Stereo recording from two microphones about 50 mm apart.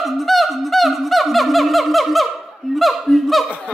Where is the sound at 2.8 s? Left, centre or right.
Centre.